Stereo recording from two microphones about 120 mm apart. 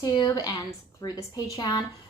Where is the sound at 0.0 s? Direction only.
35° left (ahead or behind).